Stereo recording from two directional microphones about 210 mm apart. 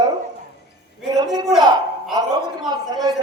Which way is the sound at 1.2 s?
20° right (ahead or behind).